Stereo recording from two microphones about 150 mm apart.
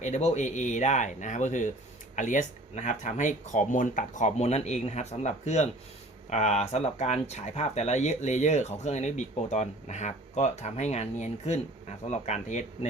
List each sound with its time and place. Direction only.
0.0 s speech: 50° left (ahead or behind)